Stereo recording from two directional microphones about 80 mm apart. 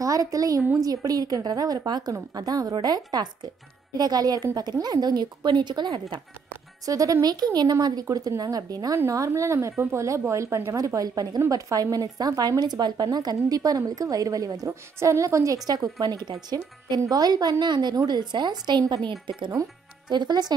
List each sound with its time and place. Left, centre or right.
0.0 s a woman's voice: right
6.9 s a woman's voice: right
10.9 s a woman's voice: right
20.1 s speech: right